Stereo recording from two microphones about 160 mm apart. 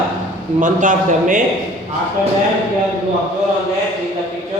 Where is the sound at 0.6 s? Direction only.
55° right (ahead or behind).